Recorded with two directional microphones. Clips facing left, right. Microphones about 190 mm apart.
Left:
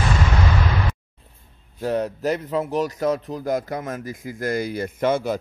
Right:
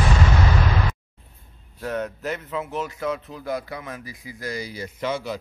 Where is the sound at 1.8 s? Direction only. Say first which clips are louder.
Left 5 dB; 35° left (ahead or behind).